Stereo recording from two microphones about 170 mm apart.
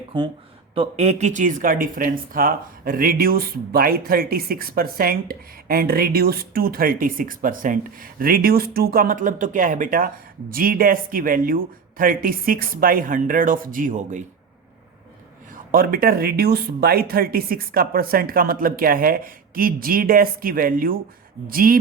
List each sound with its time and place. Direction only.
0.7 s speech: 35° right (ahead or behind)
15.5 s speech: 55° right (ahead or behind)